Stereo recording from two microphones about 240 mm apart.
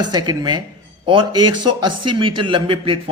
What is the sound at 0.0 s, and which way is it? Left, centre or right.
A man's voice, centre.